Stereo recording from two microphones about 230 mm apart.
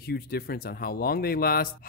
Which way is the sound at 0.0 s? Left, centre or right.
Left.